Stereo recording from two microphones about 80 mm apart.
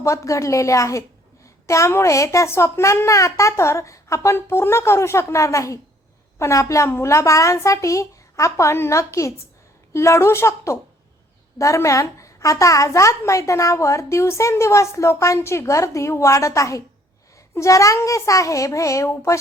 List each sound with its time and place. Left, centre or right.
0.0 s a woman's voice: left